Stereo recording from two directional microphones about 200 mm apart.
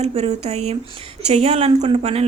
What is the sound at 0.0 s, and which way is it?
A woman's voice, 30° right (ahead or behind).